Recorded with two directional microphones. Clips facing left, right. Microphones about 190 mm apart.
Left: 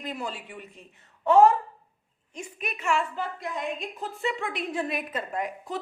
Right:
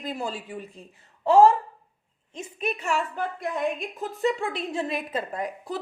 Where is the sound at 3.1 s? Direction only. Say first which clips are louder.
Right 3 dB; 55° right (ahead or behind).